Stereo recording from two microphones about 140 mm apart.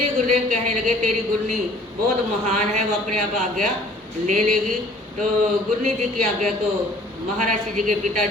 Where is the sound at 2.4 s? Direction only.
55° right (ahead or behind).